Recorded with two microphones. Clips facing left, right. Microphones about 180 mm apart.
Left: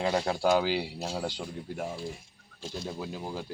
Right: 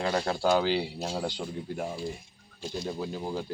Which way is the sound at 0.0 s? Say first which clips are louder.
Even; 15° left (ahead or behind).